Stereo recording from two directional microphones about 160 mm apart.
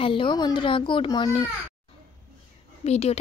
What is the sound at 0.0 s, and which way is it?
A woman's voice, 30° left (ahead or behind).